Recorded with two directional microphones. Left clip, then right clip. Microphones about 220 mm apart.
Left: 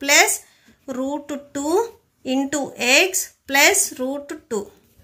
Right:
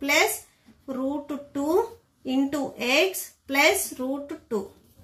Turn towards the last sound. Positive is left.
turn(degrees=50)  # may be behind; listen again after turning